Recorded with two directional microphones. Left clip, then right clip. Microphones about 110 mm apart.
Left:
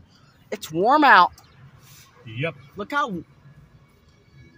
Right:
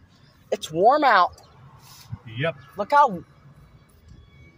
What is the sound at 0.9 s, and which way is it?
Speech, 45° left (ahead or behind).